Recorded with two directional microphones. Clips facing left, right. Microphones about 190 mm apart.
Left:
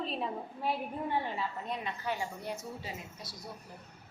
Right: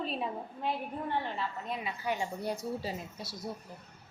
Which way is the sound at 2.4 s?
35° right (ahead or behind).